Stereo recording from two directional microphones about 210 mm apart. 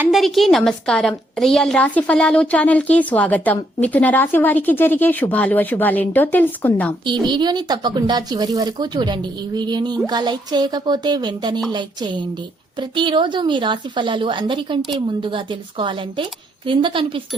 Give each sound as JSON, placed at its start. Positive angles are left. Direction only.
{"t": 0.0, "sound": "a woman's voice", "side_deg": 0}
{"t": 7.0, "sound": "a woman's voice", "side_deg": -20}